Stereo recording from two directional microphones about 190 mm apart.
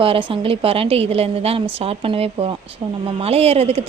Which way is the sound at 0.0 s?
30° right (ahead or behind).